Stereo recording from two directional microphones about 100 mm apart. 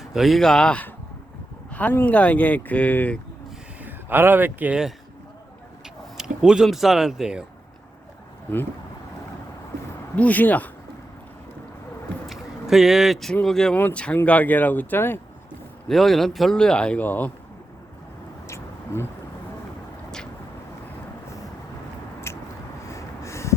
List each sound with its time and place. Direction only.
0.0 s speech: centre (ahead or behind); by 3.2 s 15° left (ahead or behind)
3.8 s speech: 20° right (ahead or behind)
6.1 s a man's voice: 5° right (ahead or behind)
10.2 s speech: 15° left (ahead or behind)
12.2 s vehicle: centre (ahead or behind)
13.3 s a man's voice: 5° left (ahead or behind); by 15.2 s 20° left (ahead or behind)
15.9 s a man's voice: centre (ahead or behind)
18.4 s a sound: 25° left (ahead or behind)
22.3 s a sound: 25° left (ahead or behind)